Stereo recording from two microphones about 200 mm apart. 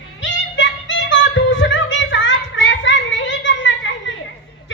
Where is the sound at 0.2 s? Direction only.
65° left (ahead or behind).